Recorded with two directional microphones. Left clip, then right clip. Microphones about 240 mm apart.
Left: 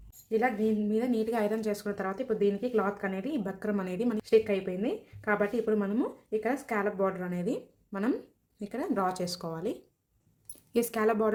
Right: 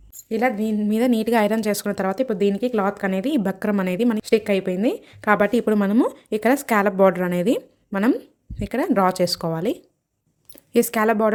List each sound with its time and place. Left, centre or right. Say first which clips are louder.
0.3 s a woman's voice: right 6 dB; right